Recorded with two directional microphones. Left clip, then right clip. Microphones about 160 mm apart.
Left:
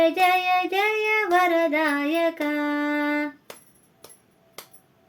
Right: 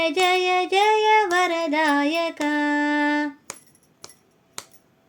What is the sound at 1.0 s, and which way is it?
Music, 35° right (ahead or behind).